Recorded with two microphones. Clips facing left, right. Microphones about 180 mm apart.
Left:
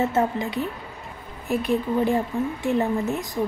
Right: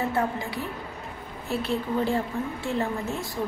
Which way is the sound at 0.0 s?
20° left (ahead or behind).